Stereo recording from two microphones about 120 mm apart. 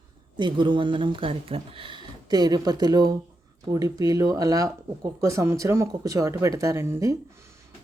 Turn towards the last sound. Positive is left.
turn(degrees=-25)  # may be behind; listen again after turning